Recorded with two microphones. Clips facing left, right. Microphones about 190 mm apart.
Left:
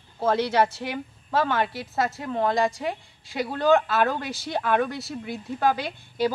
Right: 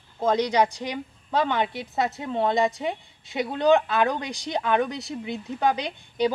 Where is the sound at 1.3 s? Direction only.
20° right (ahead or behind).